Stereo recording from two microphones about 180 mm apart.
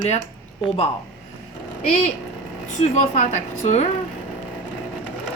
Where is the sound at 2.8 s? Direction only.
40° left (ahead or behind).